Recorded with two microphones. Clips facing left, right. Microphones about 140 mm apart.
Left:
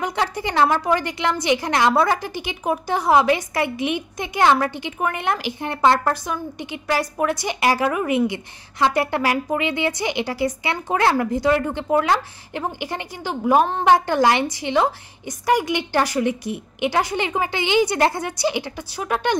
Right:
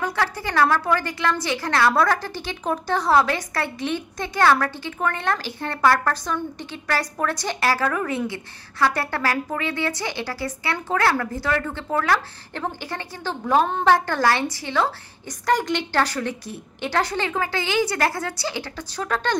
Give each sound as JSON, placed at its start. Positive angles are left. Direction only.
{"t": 0.0, "sound": "a woman's voice", "side_deg": 15}